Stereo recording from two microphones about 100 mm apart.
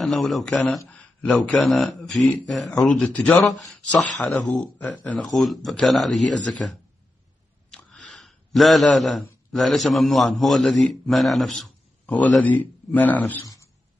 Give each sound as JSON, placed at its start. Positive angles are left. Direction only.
{"t": 0.0, "sound": "a man's voice", "side_deg": 0}
{"t": 3.3, "sound": "a man's voice", "side_deg": 0}
{"t": 3.8, "sound": "a man's voice", "side_deg": 10}
{"t": 12.1, "sound": "speech", "side_deg": 15}